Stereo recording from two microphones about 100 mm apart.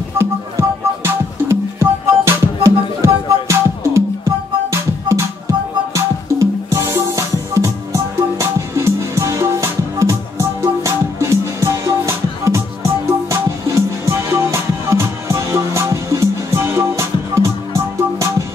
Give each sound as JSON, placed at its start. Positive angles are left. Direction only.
{"t": 0.2, "sound": "music", "side_deg": -25}